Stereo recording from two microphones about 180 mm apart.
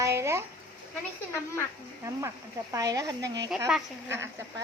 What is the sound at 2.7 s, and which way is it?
Speech, 20° right (ahead or behind).